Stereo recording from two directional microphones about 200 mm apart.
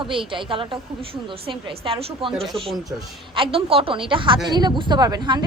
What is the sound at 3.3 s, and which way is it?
A woman's voice, 25° right (ahead or behind).